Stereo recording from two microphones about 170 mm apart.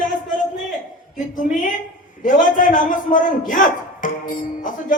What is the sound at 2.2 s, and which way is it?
Speech, 50° left (ahead or behind).